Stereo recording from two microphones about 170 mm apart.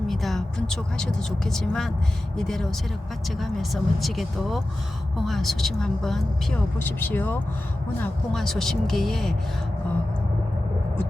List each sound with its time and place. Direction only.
0.1 s speech: centre (ahead or behind)